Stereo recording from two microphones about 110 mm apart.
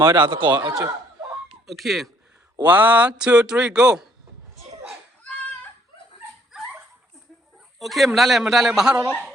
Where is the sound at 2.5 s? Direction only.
15° right (ahead or behind).